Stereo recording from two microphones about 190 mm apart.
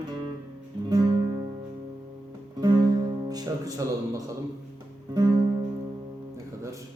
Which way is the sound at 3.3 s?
20° right (ahead or behind).